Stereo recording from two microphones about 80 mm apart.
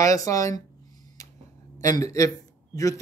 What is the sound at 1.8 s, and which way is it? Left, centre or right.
A man's voice, left.